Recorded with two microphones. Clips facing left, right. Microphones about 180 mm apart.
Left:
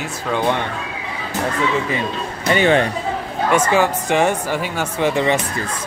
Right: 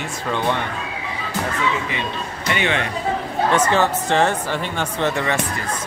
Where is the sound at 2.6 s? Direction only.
40° left (ahead or behind).